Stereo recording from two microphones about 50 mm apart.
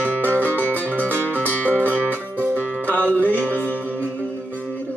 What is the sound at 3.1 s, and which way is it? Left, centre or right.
Music, left.